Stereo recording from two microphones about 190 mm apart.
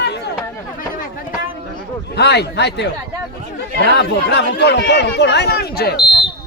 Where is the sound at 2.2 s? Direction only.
60° left (ahead or behind).